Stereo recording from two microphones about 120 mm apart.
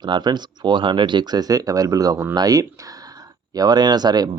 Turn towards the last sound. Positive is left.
turn(degrees=-35)  # may be behind; listen again after turning